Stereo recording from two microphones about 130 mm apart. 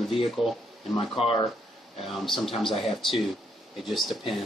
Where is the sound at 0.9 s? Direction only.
45° left (ahead or behind).